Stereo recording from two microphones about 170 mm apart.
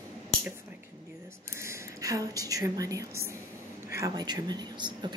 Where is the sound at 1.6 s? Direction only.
20° right (ahead or behind).